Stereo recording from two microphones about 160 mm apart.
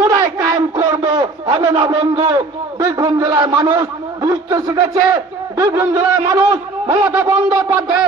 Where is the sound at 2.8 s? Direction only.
20° right (ahead or behind).